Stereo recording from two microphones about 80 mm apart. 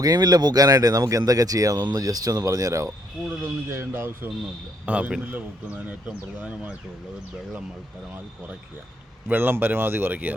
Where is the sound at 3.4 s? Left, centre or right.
Right.